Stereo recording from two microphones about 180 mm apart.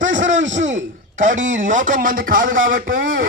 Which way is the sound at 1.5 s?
45° right (ahead or behind).